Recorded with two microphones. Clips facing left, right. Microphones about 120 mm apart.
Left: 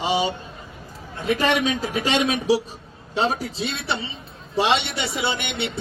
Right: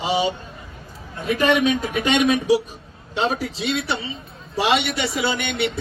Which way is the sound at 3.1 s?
40° left (ahead or behind).